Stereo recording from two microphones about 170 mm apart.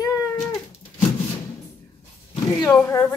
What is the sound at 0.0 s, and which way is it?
Cat, 20° left (ahead or behind).